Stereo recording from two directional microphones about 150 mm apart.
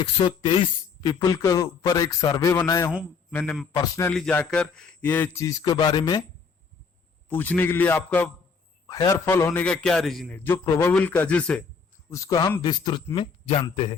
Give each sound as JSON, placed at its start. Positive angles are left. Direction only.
{"t": 0.3, "sound": "a man's voice", "side_deg": 30}
{"t": 2.9, "sound": "a man's voice", "side_deg": -5}
{"t": 3.3, "sound": "a man's voice", "side_deg": 5}
{"t": 3.7, "sound": "a man's voice", "side_deg": 20}
{"t": 4.1, "sound": "a man's voice", "side_deg": 5}
{"t": 7.3, "sound": "a man's voice", "side_deg": 10}
{"t": 8.9, "sound": "a man's voice", "side_deg": 20}
{"t": 10.3, "sound": "a man's voice", "side_deg": 10}
{"t": 12.1, "sound": "a man's voice", "side_deg": 20}